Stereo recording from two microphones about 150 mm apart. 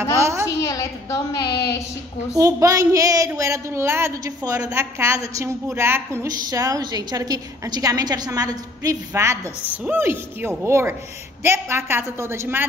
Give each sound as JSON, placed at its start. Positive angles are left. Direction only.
{"t": 0.2, "sound": "a child's voice", "side_deg": -20}
{"t": 0.6, "sound": "a woman's voice", "side_deg": 20}
{"t": 1.4, "sound": "speech", "side_deg": 90}
{"t": 2.3, "sound": "speech", "side_deg": -20}